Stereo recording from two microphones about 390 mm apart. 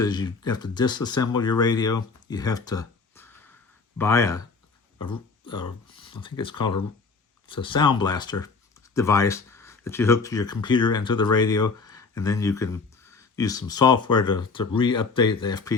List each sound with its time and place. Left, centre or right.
0.0 s speech: centre